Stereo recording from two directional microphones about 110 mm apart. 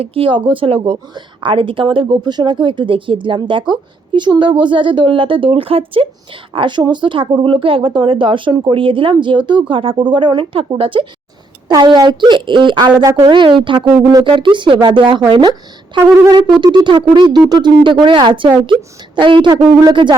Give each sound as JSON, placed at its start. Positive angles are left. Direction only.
{"t": 0.0, "sound": "a woman's voice", "side_deg": -55}
{"t": 6.5, "sound": "a woman's voice", "side_deg": -45}
{"t": 13.9, "sound": "speech", "side_deg": -30}
{"t": 14.3, "sound": "a woman's voice", "side_deg": -50}
{"t": 16.7, "sound": "a woman's voice", "side_deg": -45}